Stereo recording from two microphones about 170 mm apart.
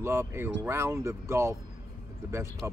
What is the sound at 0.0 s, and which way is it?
Speech, 15° right (ahead or behind).